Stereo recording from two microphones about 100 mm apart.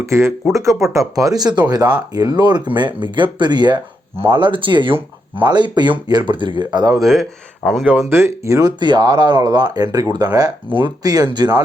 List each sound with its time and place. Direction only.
0.0 s speech: 30° right (ahead or behind); by 7.0 s 45° right (ahead or behind)
7.0 s speech: 5° left (ahead or behind)
8.0 s speech: 30° right (ahead or behind)
8.8 s speech: 45° right (ahead or behind)
10.7 s speech: 60° right (ahead or behind)
11.0 s speech: 40° right (ahead or behind)